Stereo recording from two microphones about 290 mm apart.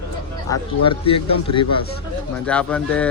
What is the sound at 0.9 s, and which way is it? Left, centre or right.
Speech, centre.